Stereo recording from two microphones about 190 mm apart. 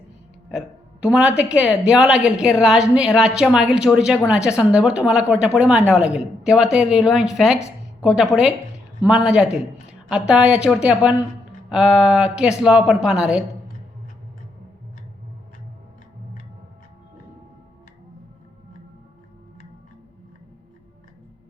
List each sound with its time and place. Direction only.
1.0 s a woman's voice: 5° right (ahead or behind)